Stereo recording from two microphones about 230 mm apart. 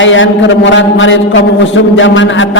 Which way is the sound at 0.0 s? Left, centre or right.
Left.